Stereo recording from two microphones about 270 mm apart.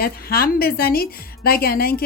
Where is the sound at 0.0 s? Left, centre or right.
Left.